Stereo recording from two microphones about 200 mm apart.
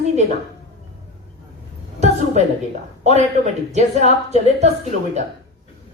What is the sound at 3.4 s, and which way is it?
A woman's voice, 35° right (ahead or behind).